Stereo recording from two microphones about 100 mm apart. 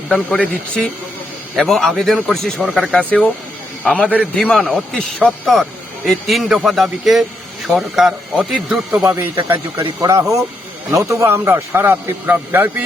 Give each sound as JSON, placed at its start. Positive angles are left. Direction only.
{"t": 0.1, "sound": "speech", "side_deg": 10}
{"t": 1.5, "sound": "a man's voice", "side_deg": 0}
{"t": 10.0, "sound": "a man's voice", "side_deg": -30}